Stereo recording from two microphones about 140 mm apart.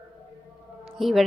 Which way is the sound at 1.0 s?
Centre (ahead or behind).